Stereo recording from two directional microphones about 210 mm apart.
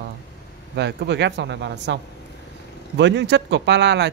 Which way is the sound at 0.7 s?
55° right (ahead or behind).